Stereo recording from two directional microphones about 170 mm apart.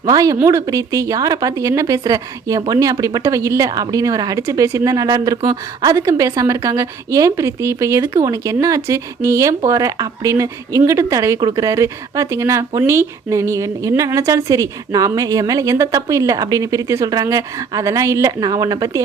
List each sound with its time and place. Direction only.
0.0 s speech: 20° right (ahead or behind)